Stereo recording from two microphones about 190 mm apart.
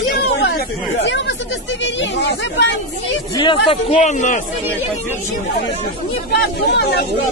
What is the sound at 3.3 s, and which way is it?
Speech, 25° left (ahead or behind).